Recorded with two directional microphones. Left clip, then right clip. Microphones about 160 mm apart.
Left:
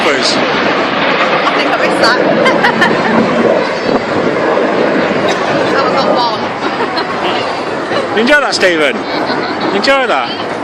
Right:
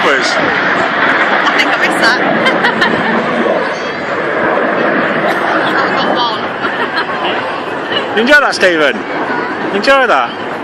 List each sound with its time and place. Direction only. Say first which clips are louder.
1.5 s speech: even; 30° left (ahead or behind)
8.1 s speech: right 2 dB; 10° right (ahead or behind)